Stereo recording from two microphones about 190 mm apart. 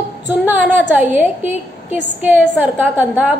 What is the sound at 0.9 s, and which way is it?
A woman's voice, 10° right (ahead or behind).